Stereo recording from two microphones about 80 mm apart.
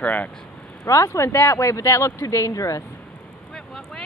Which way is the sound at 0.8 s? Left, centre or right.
Left.